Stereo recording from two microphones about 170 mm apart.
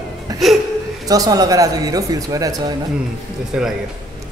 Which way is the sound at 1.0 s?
20° right (ahead or behind).